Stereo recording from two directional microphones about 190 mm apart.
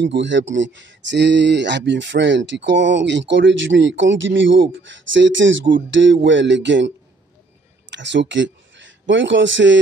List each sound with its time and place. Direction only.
0.0 s speech: 70° right (ahead or behind)
7.9 s speech: 70° right (ahead or behind)